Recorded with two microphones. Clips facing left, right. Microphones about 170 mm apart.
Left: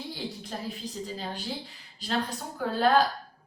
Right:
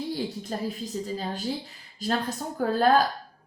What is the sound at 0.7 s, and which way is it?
Speech, 40° right (ahead or behind).